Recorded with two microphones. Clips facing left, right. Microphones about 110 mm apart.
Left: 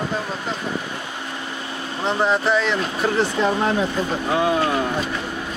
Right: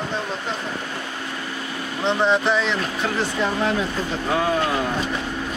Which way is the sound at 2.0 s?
5° left (ahead or behind).